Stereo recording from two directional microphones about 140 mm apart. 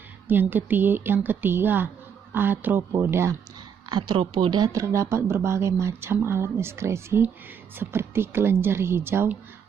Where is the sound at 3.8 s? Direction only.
35° right (ahead or behind).